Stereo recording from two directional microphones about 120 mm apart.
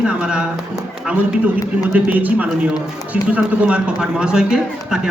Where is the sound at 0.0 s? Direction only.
5° right (ahead or behind).